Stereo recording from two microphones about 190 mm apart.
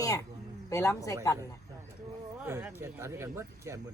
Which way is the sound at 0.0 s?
15° left (ahead or behind).